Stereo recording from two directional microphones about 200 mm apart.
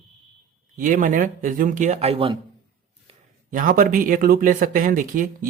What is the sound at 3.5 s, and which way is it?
Speech, 45° right (ahead or behind).